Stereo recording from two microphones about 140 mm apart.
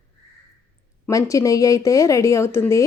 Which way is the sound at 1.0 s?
25° left (ahead or behind).